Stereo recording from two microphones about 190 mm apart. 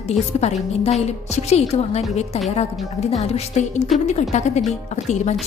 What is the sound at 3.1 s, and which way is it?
A woman's voice, 35° left (ahead or behind).